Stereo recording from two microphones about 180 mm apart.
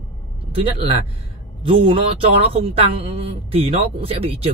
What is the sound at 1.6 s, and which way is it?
Speech, 30° right (ahead or behind).